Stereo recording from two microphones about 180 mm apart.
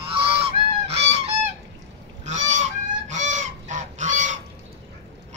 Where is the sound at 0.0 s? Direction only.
30° right (ahead or behind).